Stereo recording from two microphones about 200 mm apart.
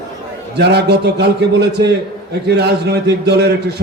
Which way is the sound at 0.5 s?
55° right (ahead or behind).